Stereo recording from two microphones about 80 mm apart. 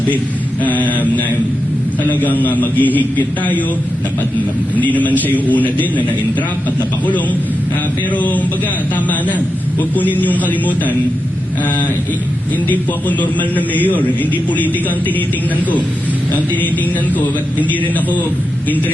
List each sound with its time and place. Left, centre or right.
0.6 s a man's voice: left
4.8 s a man's voice: left
8.1 s a man's voice: centre
9.9 s a man's voice: left
12.6 s a man's voice: left
17.2 s a man's voice: left